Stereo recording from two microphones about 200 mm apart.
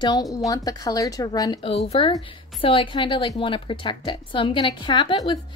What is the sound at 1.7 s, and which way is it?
Speech, 30° left (ahead or behind).